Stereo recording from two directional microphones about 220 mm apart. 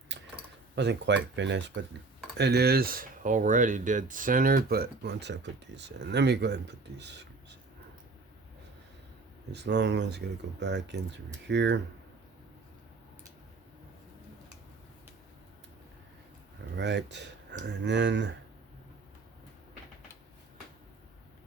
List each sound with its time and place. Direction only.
0.8 s speech: 50° right (ahead or behind)
9.5 s speech: 50° right (ahead or behind)
16.7 s speech: 50° right (ahead or behind)